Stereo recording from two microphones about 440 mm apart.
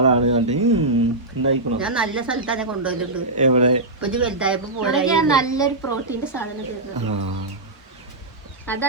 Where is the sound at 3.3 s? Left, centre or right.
Centre.